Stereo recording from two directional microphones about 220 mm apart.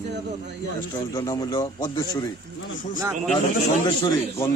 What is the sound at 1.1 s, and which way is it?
Speech, 15° left (ahead or behind).